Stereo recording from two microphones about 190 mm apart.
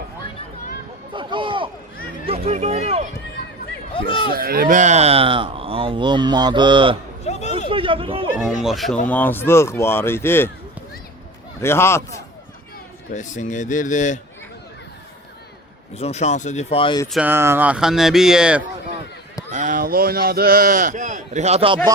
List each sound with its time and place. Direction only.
1.1 s a sound: 25° right (ahead or behind)
2.2 s speech: 30° right (ahead or behind)
3.9 s speech: 30° left (ahead or behind)
4.4 s speech: 50° right (ahead or behind); by 6.9 s 25° right (ahead or behind)
7.3 s a sound: 35° left (ahead or behind)
7.7 s speech: 30° right (ahead or behind)
8.6 s speech: centre (ahead or behind)
11.6 s speech: 15° left (ahead or behind)
13.1 s speech: 40° left (ahead or behind)
16.0 s speech: 35° left (ahead or behind)
17.1 s speech: 5° right (ahead or behind)
19.5 s speech: 40° right (ahead or behind)